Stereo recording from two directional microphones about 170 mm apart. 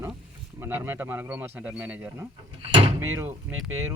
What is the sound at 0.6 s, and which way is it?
Speech, 15° right (ahead or behind).